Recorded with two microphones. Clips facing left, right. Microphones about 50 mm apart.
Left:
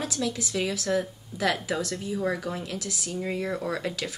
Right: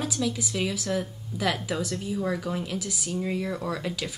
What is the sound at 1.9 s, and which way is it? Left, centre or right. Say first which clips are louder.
Speech: even; centre.